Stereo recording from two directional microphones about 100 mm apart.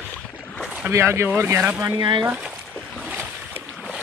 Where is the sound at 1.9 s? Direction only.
55° right (ahead or behind).